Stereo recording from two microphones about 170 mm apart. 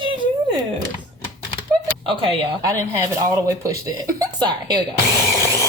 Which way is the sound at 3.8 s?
20° right (ahead or behind).